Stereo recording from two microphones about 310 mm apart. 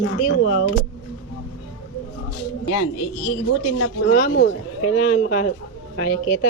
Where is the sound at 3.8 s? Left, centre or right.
Left.